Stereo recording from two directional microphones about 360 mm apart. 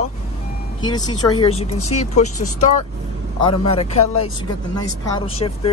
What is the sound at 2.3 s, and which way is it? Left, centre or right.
Speech, left.